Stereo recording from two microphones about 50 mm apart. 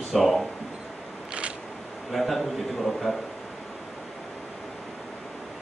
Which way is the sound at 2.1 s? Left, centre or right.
Centre.